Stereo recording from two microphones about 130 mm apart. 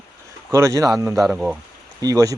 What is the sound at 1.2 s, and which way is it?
Speech, 5° right (ahead or behind).